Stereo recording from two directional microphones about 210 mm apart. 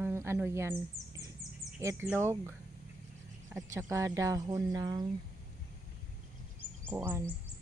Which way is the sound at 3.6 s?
15° right (ahead or behind).